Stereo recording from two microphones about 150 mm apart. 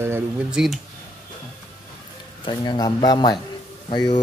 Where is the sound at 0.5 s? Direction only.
Centre (ahead or behind).